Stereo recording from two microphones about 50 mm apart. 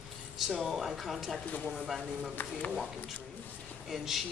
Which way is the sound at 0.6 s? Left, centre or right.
Centre.